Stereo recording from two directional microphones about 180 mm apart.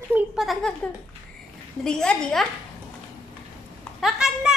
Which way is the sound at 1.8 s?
5° left (ahead or behind).